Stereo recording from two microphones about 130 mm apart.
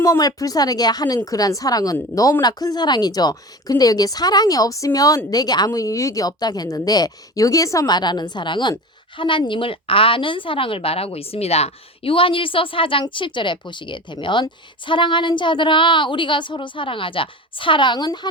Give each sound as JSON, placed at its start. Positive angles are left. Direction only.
{"t": 0.0, "sound": "speech", "side_deg": 25}